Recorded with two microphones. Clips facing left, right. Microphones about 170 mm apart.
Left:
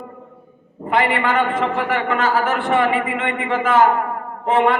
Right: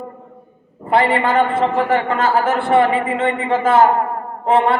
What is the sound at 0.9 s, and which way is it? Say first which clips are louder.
A man's voice: right 3 dB; 30° right (ahead or behind).